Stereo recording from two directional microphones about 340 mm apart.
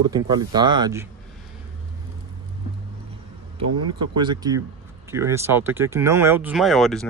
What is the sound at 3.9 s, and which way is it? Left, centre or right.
Speech, centre.